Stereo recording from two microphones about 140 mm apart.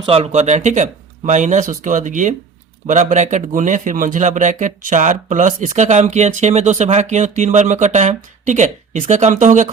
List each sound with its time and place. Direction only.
0.0 s speech: 40° right (ahead or behind); by 9.7 s 60° right (ahead or behind)